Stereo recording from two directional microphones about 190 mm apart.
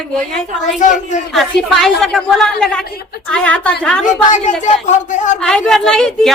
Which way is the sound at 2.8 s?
55° left (ahead or behind).